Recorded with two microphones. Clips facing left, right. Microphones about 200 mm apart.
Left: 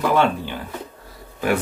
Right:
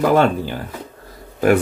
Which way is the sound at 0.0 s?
40° right (ahead or behind).